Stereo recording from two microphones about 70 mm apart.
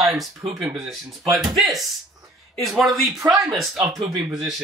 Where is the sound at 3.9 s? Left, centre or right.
Right.